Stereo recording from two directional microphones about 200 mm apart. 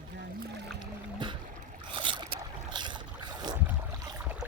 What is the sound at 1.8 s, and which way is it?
Boat, 25° right (ahead or behind).